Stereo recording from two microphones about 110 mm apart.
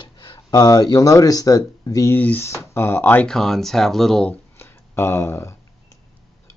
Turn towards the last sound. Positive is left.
turn(degrees=25)  # may be behind; listen again after turning